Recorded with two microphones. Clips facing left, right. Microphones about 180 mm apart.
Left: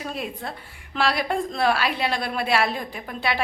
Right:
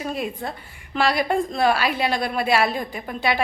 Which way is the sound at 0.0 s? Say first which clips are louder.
Right 4 dB; centre (ahead or behind).